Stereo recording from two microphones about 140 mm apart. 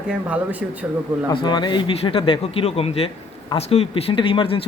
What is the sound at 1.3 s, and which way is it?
Speech, 30° left (ahead or behind).